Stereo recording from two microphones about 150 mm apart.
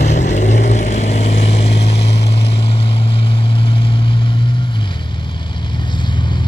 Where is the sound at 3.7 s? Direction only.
35° left (ahead or behind).